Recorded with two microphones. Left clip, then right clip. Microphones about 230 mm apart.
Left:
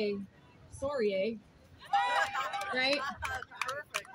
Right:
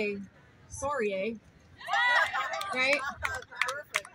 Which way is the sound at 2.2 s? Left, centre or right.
Right.